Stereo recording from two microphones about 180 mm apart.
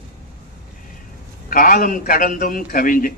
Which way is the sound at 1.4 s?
50° left (ahead or behind).